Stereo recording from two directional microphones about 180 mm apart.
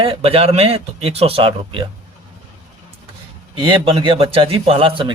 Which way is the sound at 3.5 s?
30° right (ahead or behind).